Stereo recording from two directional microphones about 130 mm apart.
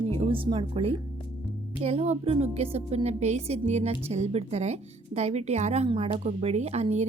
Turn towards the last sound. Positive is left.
turn(degrees=-55)  # may be behind; listen again after turning